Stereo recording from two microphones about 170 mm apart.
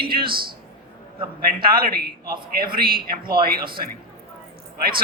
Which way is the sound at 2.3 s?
60° right (ahead or behind).